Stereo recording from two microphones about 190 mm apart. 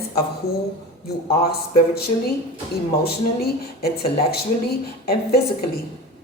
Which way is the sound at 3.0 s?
55° left (ahead or behind).